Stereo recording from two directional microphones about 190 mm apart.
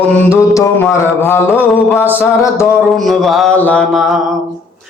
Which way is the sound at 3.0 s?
Centre (ahead or behind).